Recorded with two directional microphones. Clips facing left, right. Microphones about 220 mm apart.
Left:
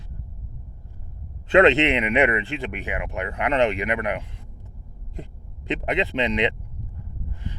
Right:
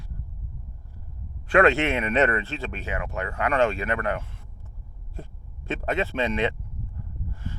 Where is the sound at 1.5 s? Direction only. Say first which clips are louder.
Left 3 dB; 20° left (ahead or behind).